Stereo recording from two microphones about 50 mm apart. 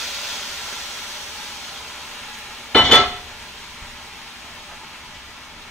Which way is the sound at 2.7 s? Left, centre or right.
Centre.